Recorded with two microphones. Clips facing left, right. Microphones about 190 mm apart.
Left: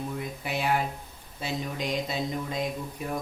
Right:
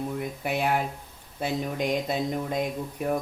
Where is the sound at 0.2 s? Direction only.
55° right (ahead or behind).